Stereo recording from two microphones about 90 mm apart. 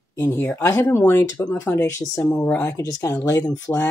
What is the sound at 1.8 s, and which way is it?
Speech, 35° left (ahead or behind).